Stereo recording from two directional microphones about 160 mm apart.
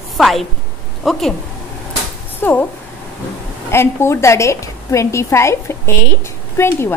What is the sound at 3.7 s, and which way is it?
A woman's voice, 15° left (ahead or behind).